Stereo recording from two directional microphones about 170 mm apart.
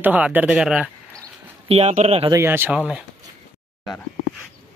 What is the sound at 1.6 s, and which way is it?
Speech, 40° right (ahead or behind).